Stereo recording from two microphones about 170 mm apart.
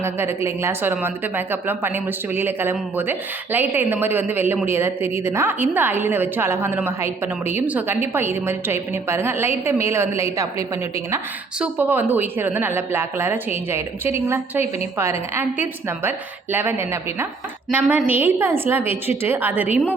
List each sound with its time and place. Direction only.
0.0 s a woman's voice: 15° right (ahead or behind)